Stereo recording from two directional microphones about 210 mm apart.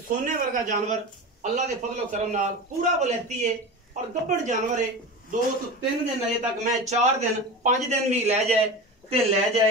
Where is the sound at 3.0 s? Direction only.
35° right (ahead or behind).